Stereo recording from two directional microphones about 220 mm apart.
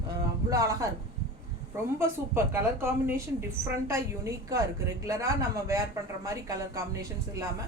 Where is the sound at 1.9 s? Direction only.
10° right (ahead or behind).